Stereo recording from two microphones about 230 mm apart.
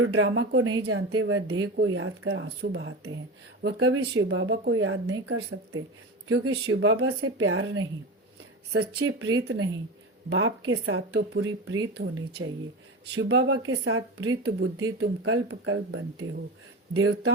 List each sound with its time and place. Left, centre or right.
0.0 s a woman's voice: right